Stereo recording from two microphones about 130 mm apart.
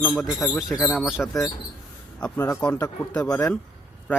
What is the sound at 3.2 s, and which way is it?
Speech, 25° left (ahead or behind).